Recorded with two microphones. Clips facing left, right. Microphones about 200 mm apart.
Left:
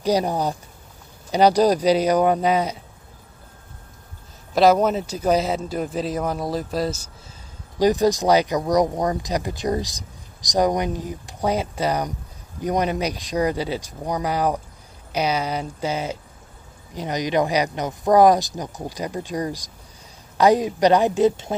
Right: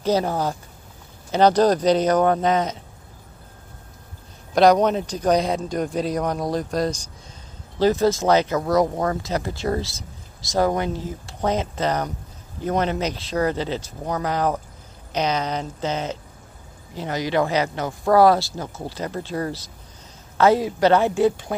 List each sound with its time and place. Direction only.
0.0 s speech: 15° left (ahead or behind)
4.6 s speech: 5° left (ahead or behind)
7.8 s speech: 15° left (ahead or behind)